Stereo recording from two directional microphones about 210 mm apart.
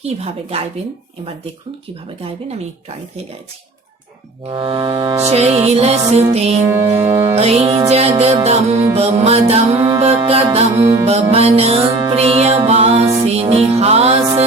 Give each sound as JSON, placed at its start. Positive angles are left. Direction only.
{"t": 0.0, "sound": "music", "side_deg": -30}
{"t": 4.4, "sound": "music", "side_deg": -25}
{"t": 6.6, "sound": "music", "side_deg": -10}
{"t": 7.3, "sound": "music", "side_deg": -30}